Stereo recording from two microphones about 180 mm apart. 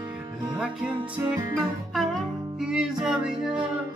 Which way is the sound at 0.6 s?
5° right (ahead or behind).